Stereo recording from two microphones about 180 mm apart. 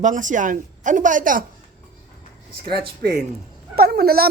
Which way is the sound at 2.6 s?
60° right (ahead or behind).